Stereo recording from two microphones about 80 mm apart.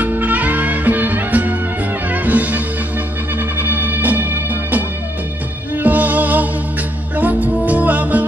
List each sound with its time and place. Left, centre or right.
0.0 s music: right